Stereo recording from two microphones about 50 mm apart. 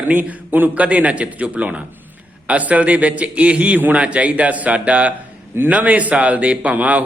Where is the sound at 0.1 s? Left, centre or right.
Right.